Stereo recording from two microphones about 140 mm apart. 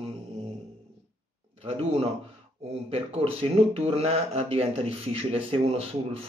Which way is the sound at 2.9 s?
45° right (ahead or behind).